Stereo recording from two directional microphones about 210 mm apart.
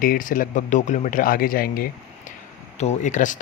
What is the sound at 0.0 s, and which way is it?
Speech, 40° left (ahead or behind).